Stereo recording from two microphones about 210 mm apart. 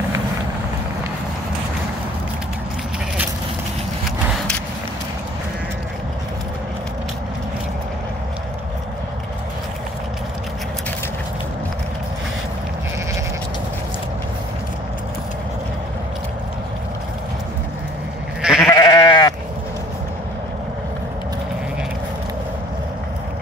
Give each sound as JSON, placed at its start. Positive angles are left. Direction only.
{"t": 18.4, "sound": "goat", "side_deg": -5}
{"t": 18.7, "sound": "goat", "side_deg": 15}